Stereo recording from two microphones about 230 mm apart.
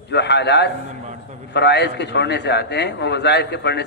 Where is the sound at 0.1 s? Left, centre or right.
Left.